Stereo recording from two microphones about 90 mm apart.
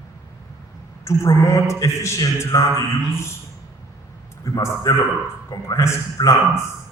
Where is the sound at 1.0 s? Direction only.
35° left (ahead or behind).